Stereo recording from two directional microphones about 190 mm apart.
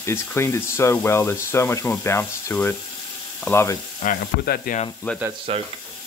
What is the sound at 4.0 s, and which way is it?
Speech, 50° left (ahead or behind).